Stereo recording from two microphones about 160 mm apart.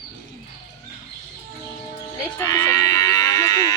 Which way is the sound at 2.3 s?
20° left (ahead or behind).